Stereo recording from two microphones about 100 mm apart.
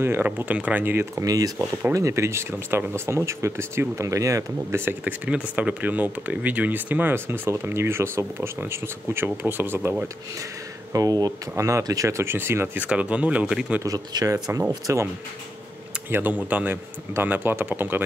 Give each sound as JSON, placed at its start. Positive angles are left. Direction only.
{"t": 0.0, "sound": "speech", "side_deg": -20}
{"t": 1.2, "sound": "speech", "side_deg": -40}
{"t": 1.6, "sound": "speech", "side_deg": -15}
{"t": 2.0, "sound": "speech", "side_deg": -30}
{"t": 10.9, "sound": "speech", "side_deg": -35}
{"t": 13.8, "sound": "speech", "side_deg": -35}
{"t": 16.1, "sound": "speech", "side_deg": -20}